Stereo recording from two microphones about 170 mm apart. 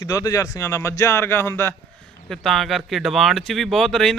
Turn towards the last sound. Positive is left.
turn(degrees=5)  # may be behind; listen again after turning